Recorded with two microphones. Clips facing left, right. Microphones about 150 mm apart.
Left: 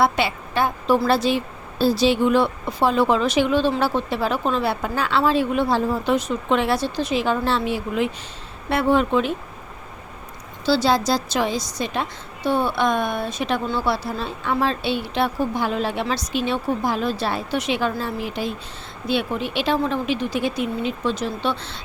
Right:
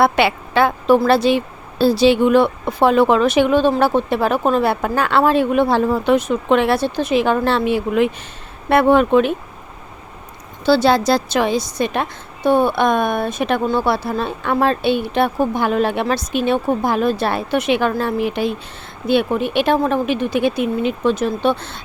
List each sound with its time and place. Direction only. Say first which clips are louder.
0.0 s a woman's voice: right 5 dB; 70° right (ahead or behind)
10.7 s a woman's voice: right 5 dB; 60° right (ahead or behind)